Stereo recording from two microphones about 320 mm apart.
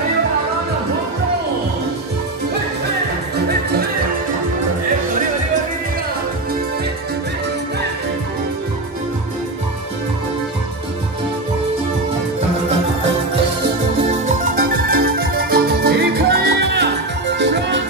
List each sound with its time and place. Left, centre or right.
14.2 s music: right